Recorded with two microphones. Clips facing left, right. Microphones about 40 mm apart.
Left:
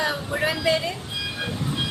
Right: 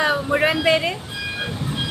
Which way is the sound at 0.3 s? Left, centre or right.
Right.